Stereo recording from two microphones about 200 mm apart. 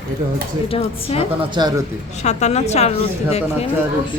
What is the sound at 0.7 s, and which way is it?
A woman's voice, 30° left (ahead or behind).